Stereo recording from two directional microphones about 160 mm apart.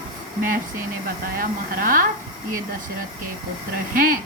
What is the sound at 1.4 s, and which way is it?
Speech, 60° right (ahead or behind).